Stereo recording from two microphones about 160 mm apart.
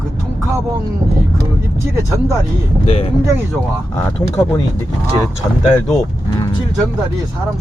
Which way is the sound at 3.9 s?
20° left (ahead or behind).